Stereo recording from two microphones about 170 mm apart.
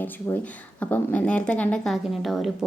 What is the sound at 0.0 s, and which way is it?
A woman's voice, 10° left (ahead or behind).